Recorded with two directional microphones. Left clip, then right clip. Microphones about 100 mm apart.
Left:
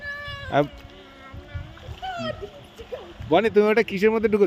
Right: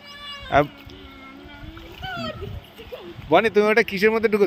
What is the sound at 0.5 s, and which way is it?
Speech, 25° left (ahead or behind).